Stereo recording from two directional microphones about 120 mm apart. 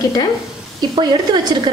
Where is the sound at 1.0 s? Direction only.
35° right (ahead or behind).